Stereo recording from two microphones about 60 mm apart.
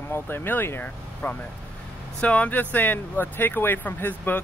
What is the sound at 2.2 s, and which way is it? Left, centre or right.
Speech, left.